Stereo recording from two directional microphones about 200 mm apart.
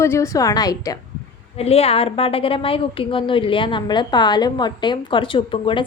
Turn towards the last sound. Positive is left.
turn(degrees=25)  # may be behind; listen again after turning